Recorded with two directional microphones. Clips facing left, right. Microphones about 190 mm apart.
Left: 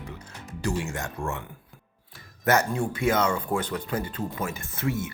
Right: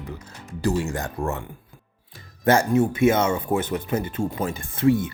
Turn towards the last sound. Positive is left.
turn(degrees=-30)  # may be behind; listen again after turning